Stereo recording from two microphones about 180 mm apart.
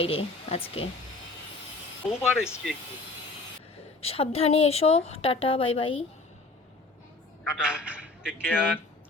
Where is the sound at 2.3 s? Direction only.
5° right (ahead or behind).